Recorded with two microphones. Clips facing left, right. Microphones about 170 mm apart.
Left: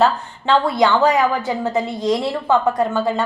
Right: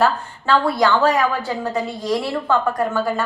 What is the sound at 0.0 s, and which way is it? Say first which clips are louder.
A woman's voice: left 2 dB; 20° left (ahead or behind).